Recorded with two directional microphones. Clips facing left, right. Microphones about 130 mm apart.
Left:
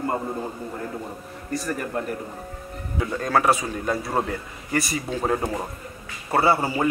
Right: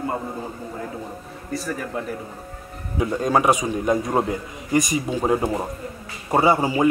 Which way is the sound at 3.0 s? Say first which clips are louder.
Right 3 dB; 15° right (ahead or behind).